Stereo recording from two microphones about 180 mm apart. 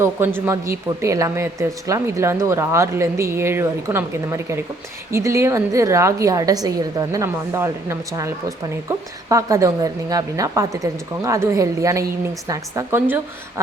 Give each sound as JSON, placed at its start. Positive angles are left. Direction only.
{"t": 0.0, "sound": "a woman's voice", "side_deg": -10}